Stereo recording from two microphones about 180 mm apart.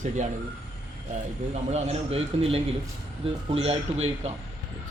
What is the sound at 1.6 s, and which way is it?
A man's voice, 35° right (ahead or behind).